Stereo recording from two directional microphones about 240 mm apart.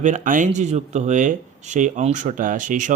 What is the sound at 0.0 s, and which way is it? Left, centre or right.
Speech, right.